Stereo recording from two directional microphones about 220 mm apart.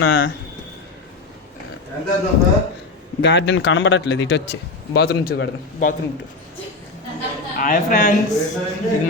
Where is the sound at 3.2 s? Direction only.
50° left (ahead or behind).